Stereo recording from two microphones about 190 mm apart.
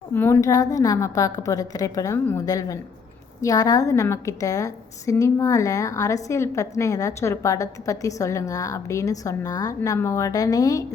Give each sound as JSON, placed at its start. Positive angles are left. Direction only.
{"t": 0.1, "sound": "a woman's voice", "side_deg": 10}